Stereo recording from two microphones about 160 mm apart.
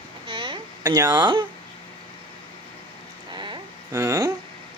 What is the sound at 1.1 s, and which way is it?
Speech, 30° right (ahead or behind).